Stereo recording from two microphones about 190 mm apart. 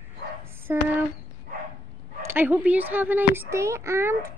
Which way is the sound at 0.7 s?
10° right (ahead or behind).